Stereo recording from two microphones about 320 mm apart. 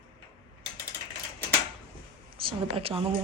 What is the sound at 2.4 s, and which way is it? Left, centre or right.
Speech, centre.